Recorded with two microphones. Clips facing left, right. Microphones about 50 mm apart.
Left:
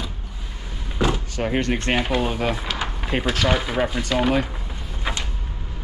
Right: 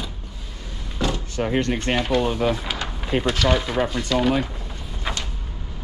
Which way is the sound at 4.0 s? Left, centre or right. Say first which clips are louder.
Even; left.